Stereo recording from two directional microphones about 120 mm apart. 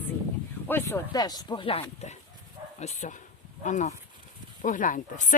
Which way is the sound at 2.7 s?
70° left (ahead or behind).